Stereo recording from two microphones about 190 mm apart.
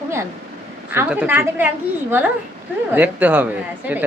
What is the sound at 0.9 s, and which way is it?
Speech, 10° right (ahead or behind).